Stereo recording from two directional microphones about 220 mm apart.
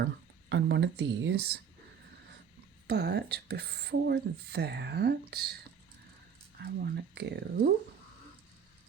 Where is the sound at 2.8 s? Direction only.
50° right (ahead or behind).